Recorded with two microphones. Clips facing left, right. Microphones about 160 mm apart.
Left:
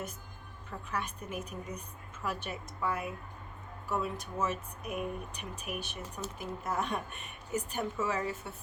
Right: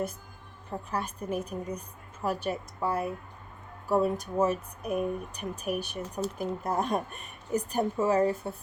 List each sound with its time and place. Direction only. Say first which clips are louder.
0.7 s speech: right 5 dB; 35° right (ahead or behind)